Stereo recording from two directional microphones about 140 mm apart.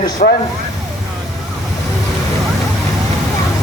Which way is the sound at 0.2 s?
75° left (ahead or behind).